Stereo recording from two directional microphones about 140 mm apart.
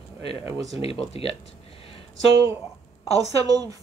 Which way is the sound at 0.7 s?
45° left (ahead or behind).